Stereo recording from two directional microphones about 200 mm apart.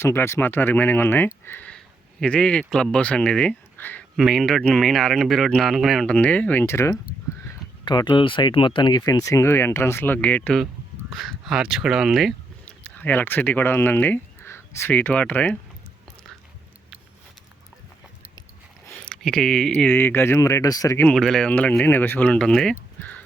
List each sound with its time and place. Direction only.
0.0 s speech: 10° left (ahead or behind)
18.9 s speech: 5° left (ahead or behind)